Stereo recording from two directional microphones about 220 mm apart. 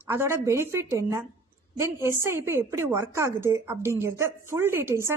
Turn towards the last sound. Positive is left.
turn(degrees=-10)  # may be behind; listen again after turning